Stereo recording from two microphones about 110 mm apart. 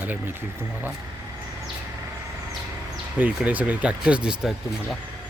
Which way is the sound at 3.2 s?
15° right (ahead or behind).